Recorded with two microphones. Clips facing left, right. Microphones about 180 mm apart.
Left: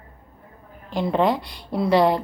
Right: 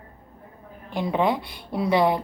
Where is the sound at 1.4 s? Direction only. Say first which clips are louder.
Even; 55° right (ahead or behind).